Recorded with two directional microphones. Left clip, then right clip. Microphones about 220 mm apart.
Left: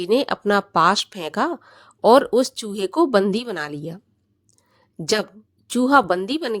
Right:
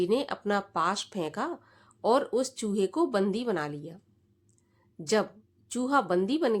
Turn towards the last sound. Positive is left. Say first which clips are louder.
# left 4 dB
turn(degrees=40)  # may be behind; listen again after turning